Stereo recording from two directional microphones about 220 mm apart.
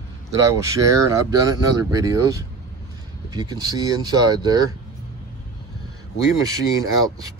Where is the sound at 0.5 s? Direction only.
15° right (ahead or behind).